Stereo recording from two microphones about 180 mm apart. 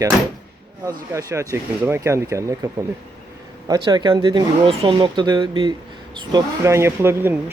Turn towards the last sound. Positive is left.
turn(degrees=-10)  # may be behind; listen again after turning